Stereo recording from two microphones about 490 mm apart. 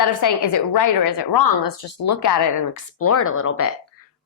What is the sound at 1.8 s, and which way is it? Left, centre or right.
Speech, left.